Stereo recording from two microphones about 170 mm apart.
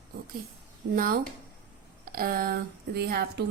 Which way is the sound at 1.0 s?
55° right (ahead or behind).